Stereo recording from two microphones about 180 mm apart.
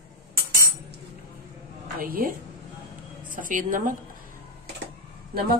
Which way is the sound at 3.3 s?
50° right (ahead or behind).